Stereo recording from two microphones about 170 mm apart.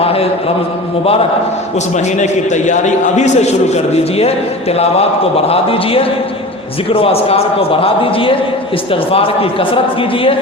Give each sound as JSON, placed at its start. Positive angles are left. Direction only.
{"t": 0.0, "sound": "a sound", "side_deg": 35}
{"t": 2.1, "sound": "a man's voice", "side_deg": 45}
{"t": 4.8, "sound": "a man's voice", "side_deg": 35}